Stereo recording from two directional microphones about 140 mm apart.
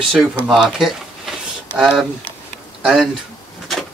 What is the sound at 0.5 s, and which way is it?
Speech, 5° right (ahead or behind).